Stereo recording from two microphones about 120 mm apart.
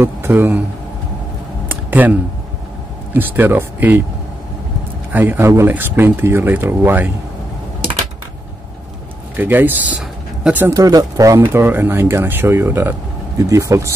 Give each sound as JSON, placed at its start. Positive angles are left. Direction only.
{"t": 0.0, "sound": "a man's voice", "side_deg": -20}
{"t": 1.7, "sound": "a sound", "side_deg": -15}
{"t": 3.1, "sound": "speech", "side_deg": -15}
{"t": 5.1, "sound": "speech", "side_deg": -15}
{"t": 9.4, "sound": "speech", "side_deg": -15}
{"t": 10.7, "sound": "speech", "side_deg": -30}